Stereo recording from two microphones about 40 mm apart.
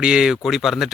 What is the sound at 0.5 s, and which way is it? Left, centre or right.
Speech, centre.